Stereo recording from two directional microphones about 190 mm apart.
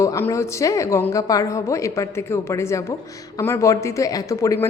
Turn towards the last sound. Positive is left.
turn(degrees=15)  # may be behind; listen again after turning